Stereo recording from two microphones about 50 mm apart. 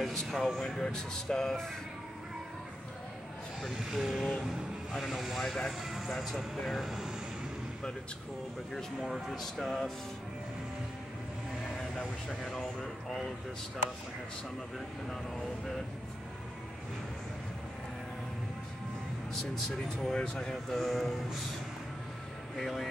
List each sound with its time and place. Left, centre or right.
0.0 s speech: centre
3.9 s speech: centre
9.0 s speech: centre
12.4 s speech: centre
19.5 s speech: centre
20.2 s speech: centre
20.7 s speech: centre
22.6 s speech: centre